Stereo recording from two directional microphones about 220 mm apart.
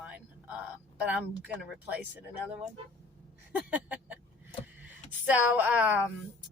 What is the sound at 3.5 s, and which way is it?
Speech, 5° right (ahead or behind).